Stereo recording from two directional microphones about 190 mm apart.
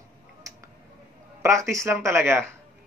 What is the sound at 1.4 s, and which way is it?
Speech, 15° right (ahead or behind).